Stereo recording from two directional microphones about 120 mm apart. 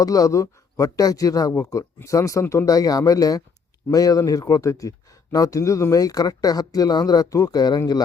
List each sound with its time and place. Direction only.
0.0 s speech: 30° left (ahead or behind)